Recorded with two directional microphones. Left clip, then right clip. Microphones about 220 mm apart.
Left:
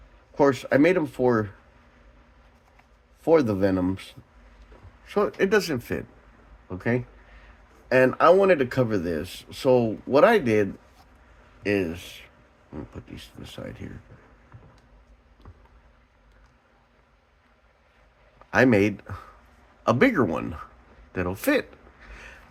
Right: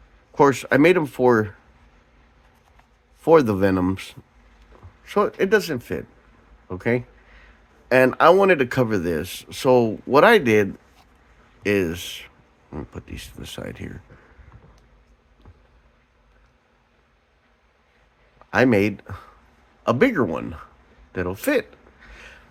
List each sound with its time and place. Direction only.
0.3 s speech: 30° right (ahead or behind)
3.2 s speech: 30° right (ahead or behind)
18.5 s speech: 20° right (ahead or behind)
21.1 s a sound: 15° right (ahead or behind)